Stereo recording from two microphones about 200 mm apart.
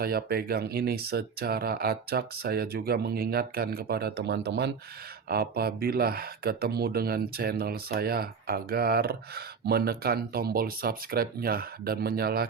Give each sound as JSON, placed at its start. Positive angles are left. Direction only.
{"t": 0.0, "sound": "speech", "side_deg": -50}